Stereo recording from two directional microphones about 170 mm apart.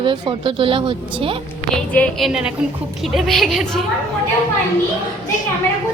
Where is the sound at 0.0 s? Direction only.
30° right (ahead or behind).